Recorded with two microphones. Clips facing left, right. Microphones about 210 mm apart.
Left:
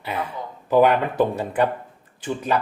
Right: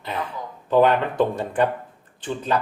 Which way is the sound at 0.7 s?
10° left (ahead or behind).